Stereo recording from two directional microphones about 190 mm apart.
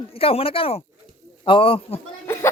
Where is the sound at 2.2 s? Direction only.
15° left (ahead or behind).